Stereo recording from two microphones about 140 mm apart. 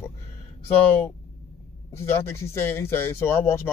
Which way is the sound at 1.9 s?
20° left (ahead or behind).